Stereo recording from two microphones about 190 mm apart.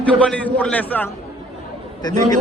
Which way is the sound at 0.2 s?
5° left (ahead or behind).